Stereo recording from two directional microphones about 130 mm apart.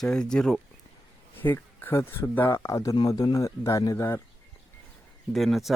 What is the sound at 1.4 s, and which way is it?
Speech, 15° left (ahead or behind).